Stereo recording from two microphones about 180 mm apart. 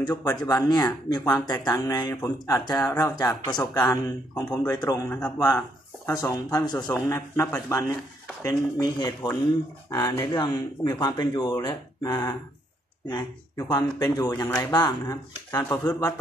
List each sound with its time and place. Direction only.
0.0 s speech: 25° left (ahead or behind)